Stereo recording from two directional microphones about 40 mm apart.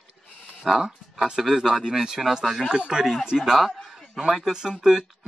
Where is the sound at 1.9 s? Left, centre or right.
Centre.